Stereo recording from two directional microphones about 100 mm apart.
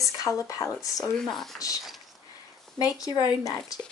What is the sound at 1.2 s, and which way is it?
Speech, 5° left (ahead or behind).